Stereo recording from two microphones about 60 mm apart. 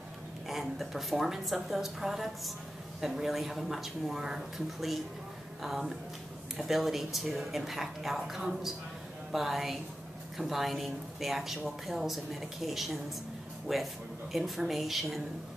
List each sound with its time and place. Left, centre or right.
0.5 s speech: centre